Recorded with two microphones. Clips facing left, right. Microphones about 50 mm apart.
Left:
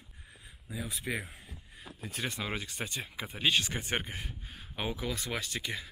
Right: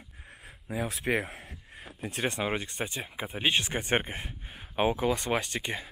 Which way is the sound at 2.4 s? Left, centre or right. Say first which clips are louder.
Right 5 dB; right.